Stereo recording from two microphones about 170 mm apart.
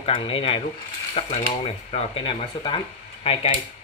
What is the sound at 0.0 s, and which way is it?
Speech, 30° left (ahead or behind).